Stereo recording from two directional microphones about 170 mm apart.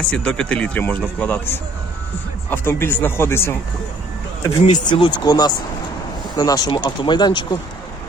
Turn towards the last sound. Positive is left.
turn(degrees=25)  # may be behind; listen again after turning